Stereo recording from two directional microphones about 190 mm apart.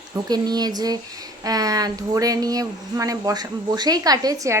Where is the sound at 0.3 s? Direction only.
20° right (ahead or behind).